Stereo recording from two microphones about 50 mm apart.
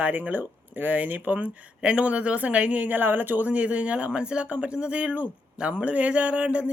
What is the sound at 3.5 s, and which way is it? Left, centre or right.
Speech, right.